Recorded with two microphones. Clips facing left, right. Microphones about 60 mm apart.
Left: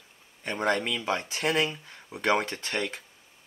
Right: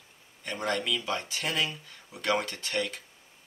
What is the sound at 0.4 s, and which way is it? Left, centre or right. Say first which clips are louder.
Speech: left 4 dB; left.